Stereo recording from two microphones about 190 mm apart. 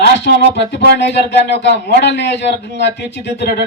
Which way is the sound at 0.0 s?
60° left (ahead or behind).